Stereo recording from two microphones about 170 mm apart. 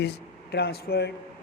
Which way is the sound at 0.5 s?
65° left (ahead or behind).